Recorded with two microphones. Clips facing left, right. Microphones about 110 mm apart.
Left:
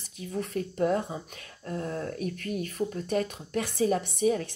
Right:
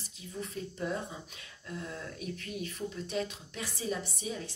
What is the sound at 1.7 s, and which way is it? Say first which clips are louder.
Speech: left 8 dB; 45° left (ahead or behind).